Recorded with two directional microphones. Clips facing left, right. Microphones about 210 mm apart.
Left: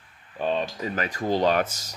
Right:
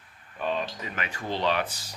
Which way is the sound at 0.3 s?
30° left (ahead or behind).